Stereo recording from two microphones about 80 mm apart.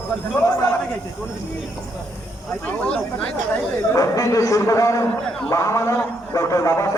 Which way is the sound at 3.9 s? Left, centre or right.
Left.